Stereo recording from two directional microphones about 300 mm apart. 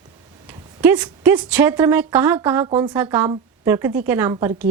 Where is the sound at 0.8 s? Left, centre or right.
Centre.